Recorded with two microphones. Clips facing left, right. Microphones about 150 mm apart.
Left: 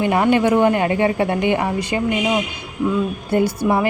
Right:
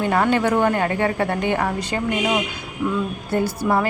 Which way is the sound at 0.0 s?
15° left (ahead or behind).